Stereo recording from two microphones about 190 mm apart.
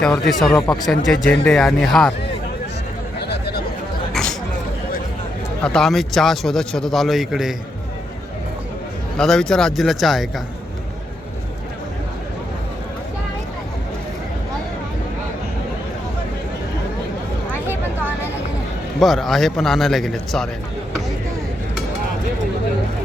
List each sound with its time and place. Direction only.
0.0 s speech: centre (ahead or behind)
3.2 s chatter: 60° left (ahead or behind)
4.1 s a sound: 5° left (ahead or behind)
5.6 s speech: centre (ahead or behind)
9.1 s speech: 5° left (ahead or behind)
17.7 s a sound: 10° right (ahead or behind)
18.9 s speech: centre (ahead or behind)